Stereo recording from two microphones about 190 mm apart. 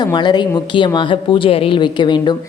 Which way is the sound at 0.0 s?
20° left (ahead or behind).